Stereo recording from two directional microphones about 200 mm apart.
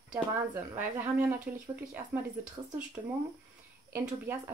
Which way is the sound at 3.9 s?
10° right (ahead or behind).